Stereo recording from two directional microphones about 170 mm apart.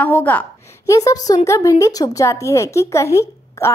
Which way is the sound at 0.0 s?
10° left (ahead or behind).